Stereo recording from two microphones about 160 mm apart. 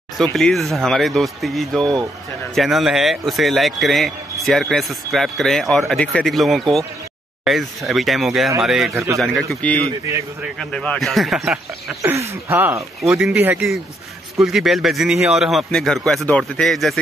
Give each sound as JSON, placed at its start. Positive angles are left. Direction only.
{"t": 0.2, "sound": "a man's voice", "side_deg": 5}
{"t": 8.9, "sound": "speech", "side_deg": -15}
{"t": 9.2, "sound": "a man's voice", "side_deg": 0}
{"t": 12.0, "sound": "a man's voice", "side_deg": -15}